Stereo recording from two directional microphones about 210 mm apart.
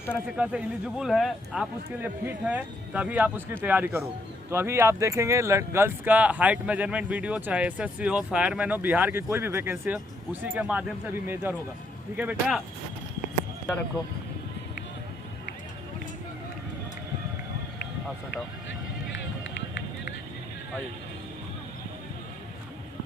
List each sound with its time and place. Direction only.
0.3 s speech: 5° right (ahead or behind)